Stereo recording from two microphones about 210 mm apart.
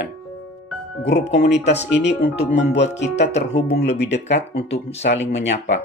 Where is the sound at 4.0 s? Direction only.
55° left (ahead or behind).